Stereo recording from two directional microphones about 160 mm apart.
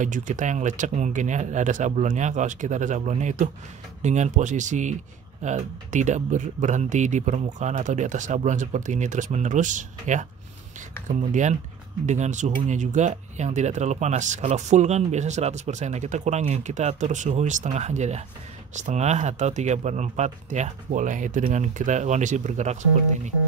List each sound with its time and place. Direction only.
0.0 s speech: 50° right (ahead or behind)